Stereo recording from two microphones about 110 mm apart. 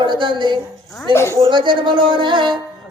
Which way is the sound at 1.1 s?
25° left (ahead or behind).